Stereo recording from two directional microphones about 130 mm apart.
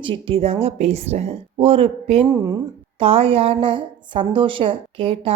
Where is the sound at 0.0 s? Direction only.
40° right (ahead or behind).